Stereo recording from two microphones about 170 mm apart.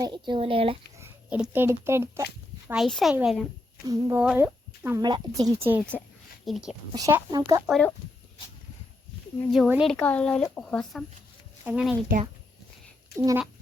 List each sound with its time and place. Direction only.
0.0 s speech: 25° right (ahead or behind)
0.9 s speech: 10° right (ahead or behind)
2.6 s a woman's voice: centre (ahead or behind)
3.8 s speech: 20° right (ahead or behind)
5.0 s speech: 25° right (ahead or behind)
5.5 s speech: 15° right (ahead or behind)
6.4 s speech: centre (ahead or behind)
6.9 s speech: 20° right (ahead or behind)
7.7 s a woman's voice: 5° left (ahead or behind)
9.5 s a woman's voice: 5° right (ahead or behind)
9.9 s a woman's voice: 10° left (ahead or behind)
13.1 s speech: 15° right (ahead or behind)